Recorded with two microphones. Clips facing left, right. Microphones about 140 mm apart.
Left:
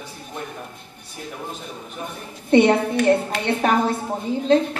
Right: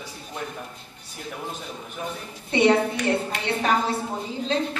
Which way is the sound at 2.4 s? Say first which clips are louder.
Left 4 dB; 55° left (ahead or behind).